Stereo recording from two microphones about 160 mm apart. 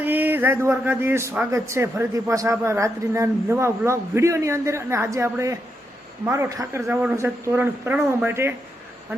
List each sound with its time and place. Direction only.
0.0 s speech: 10° right (ahead or behind)